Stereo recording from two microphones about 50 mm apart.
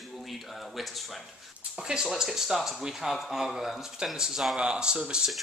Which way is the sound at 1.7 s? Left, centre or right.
Centre.